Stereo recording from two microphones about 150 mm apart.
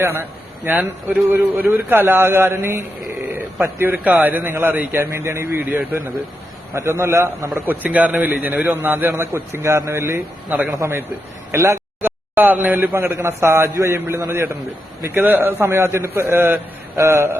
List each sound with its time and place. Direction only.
0.0 s a man's voice: 15° right (ahead or behind)